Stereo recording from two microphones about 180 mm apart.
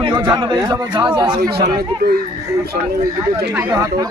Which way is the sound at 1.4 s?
60° right (ahead or behind).